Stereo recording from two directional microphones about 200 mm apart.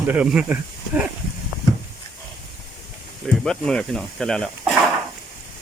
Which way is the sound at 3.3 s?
5° left (ahead or behind).